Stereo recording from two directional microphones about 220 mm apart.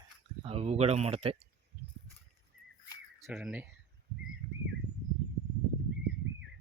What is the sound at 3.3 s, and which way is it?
Speech, 5° right (ahead or behind).